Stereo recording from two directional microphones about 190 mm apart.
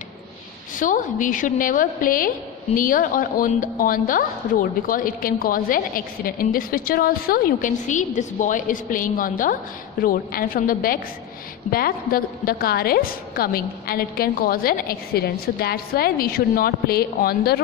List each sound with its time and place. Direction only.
0.7 s a woman's voice: 45° left (ahead or behind)